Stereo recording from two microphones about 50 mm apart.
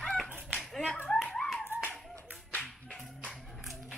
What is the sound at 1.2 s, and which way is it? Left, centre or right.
Clapping, centre.